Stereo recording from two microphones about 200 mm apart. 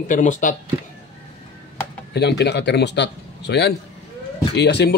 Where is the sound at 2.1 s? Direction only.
55° left (ahead or behind).